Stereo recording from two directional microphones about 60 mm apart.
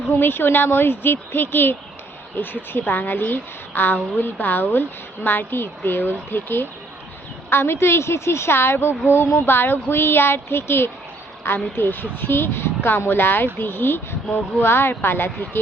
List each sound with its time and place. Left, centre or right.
0.2 s a woman's voice: left